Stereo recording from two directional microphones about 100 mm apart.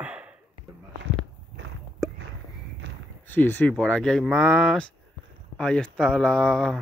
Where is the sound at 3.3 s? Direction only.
20° left (ahead or behind).